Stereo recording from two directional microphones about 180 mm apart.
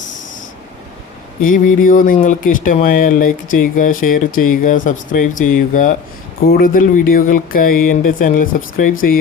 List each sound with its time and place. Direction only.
1.5 s speech: 45° left (ahead or behind)